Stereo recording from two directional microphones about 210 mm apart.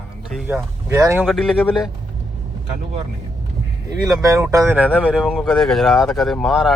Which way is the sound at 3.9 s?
15° right (ahead or behind).